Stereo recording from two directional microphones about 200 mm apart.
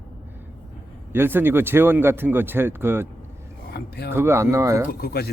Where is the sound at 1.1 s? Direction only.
10° right (ahead or behind).